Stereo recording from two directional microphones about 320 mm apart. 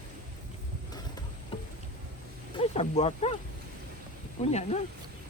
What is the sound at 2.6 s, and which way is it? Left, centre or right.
Speech, centre.